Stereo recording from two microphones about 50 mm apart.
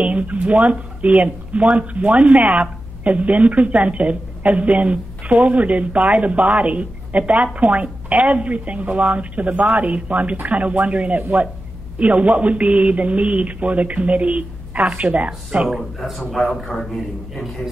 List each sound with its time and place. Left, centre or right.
0.0 s speech: right
16.0 s a man's voice: centre